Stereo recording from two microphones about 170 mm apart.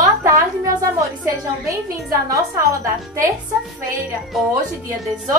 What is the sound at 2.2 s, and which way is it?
Music, 20° right (ahead or behind).